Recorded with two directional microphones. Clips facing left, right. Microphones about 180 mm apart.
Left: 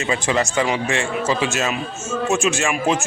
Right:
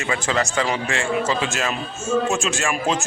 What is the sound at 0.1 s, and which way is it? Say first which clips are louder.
A man's voice: left 2 dB; 20° left (ahead or behind).